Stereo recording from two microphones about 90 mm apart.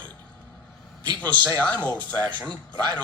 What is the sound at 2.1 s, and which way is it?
Speech, 50° right (ahead or behind).